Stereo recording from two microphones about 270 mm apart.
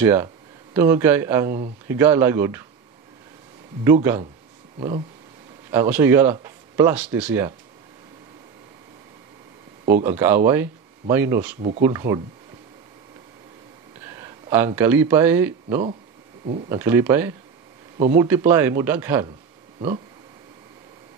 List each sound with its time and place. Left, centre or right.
0.0 s speech: centre
3.8 s speech: centre
4.7 s speech: right
5.7 s speech: centre
10.0 s speech: centre
14.0 s a sound: centre
14.8 s speech: centre